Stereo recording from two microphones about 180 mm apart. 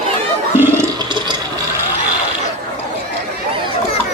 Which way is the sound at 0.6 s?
15° right (ahead or behind).